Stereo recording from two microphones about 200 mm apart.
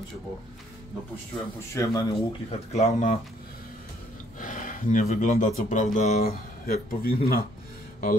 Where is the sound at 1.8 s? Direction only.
15° left (ahead or behind).